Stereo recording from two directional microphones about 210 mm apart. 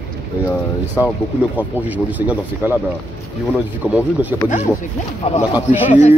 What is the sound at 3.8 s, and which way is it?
Speech, 5° right (ahead or behind).